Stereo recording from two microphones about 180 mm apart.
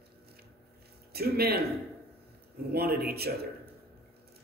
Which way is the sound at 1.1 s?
60° right (ahead or behind).